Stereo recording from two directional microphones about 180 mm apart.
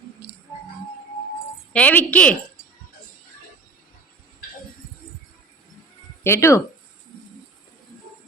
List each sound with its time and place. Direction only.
0.2 s music: 65° right (ahead or behind)
1.7 s a woman's voice: 10° left (ahead or behind)
6.2 s a woman's voice: 15° left (ahead or behind)